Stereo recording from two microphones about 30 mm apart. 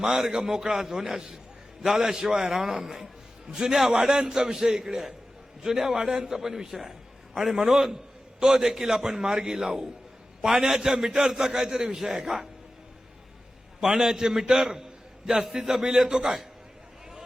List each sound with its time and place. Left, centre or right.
0.0 s a man's voice: centre
2.0 s a man's voice: centre
13.8 s a man's voice: centre